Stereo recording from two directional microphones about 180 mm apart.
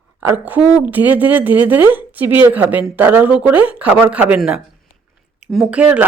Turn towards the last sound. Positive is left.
turn(degrees=-10)  # may be behind; listen again after turning